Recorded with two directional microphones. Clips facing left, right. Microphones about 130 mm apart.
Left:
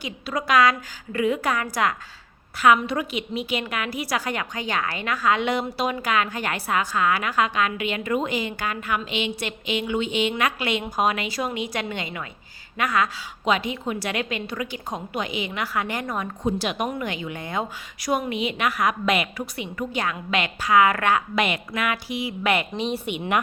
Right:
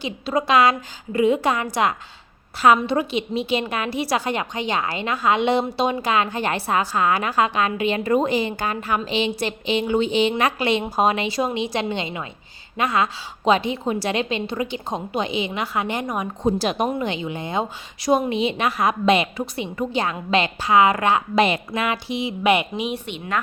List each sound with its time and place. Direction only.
0.0 s a woman's voice: 25° right (ahead or behind)
16.4 s a woman's voice: 35° right (ahead or behind)
22.7 s speech: 10° right (ahead or behind)